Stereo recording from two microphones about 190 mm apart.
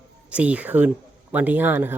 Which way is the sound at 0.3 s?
5° right (ahead or behind).